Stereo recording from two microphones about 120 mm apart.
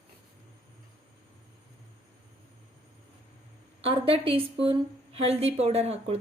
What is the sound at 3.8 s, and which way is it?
A woman's voice, 50° right (ahead or behind).